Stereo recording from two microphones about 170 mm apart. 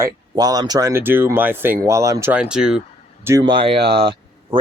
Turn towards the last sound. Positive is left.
turn(degrees=-30)  # may be behind; listen again after turning